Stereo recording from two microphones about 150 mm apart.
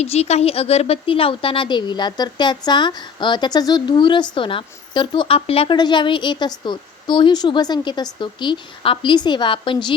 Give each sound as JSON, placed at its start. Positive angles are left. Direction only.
{"t": 0.0, "sound": "speech", "side_deg": 45}